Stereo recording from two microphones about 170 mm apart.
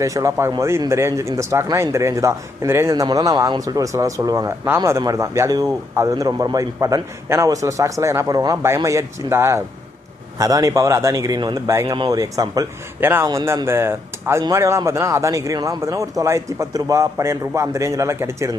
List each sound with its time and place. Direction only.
0.0 s speech: 20° right (ahead or behind)